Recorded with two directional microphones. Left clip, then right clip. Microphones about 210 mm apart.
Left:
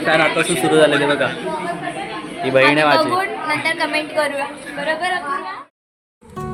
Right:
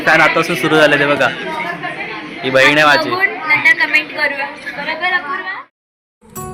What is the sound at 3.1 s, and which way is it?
A woman's voice, 20° left (ahead or behind).